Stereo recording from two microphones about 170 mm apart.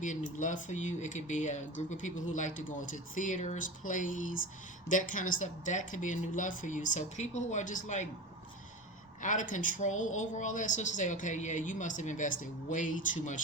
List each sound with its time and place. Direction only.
0.0 s speech: 50° left (ahead or behind)
9.2 s speech: 50° left (ahead or behind)